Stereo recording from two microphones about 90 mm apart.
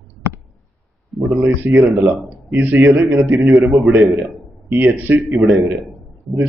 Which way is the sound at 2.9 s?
30° right (ahead or behind).